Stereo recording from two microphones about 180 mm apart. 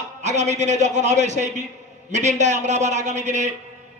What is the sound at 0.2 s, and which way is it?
A man's voice, 40° right (ahead or behind).